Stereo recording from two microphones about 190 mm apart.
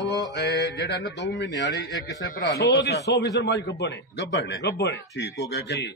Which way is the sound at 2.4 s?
60° left (ahead or behind).